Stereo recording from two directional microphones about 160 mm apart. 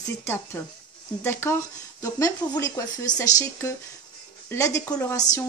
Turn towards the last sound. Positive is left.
turn(degrees=20)  # may be behind; listen again after turning